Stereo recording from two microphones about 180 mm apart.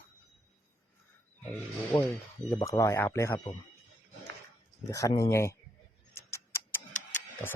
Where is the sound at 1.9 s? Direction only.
15° left (ahead or behind).